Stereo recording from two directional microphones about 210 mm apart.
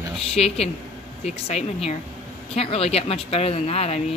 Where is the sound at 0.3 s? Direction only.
30° left (ahead or behind).